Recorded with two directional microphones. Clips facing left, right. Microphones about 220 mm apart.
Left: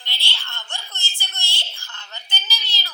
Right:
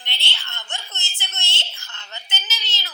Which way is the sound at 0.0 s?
20° right (ahead or behind).